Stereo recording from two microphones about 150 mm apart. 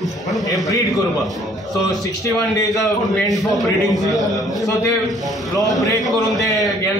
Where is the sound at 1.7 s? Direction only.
25° left (ahead or behind).